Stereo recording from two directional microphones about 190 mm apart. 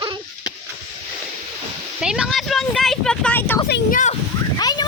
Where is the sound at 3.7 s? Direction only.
45° left (ahead or behind).